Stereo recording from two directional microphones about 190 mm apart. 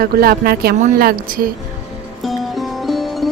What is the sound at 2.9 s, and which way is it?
Music, centre (ahead or behind).